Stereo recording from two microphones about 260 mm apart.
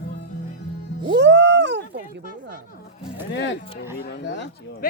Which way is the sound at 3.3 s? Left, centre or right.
Left.